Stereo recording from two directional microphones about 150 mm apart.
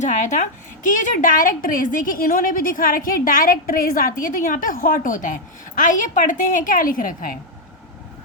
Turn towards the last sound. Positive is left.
turn(degrees=65)  # may be behind; listen again after turning